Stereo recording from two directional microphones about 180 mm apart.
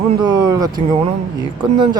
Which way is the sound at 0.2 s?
25° right (ahead or behind).